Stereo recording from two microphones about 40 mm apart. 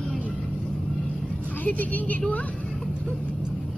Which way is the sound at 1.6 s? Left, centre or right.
Left.